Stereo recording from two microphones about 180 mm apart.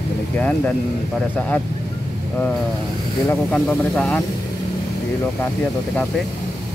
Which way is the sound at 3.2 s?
10° left (ahead or behind).